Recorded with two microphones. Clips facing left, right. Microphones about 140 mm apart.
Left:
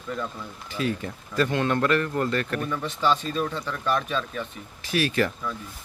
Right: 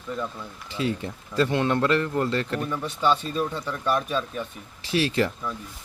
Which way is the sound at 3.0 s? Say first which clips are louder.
Right 1 dB; 5° right (ahead or behind).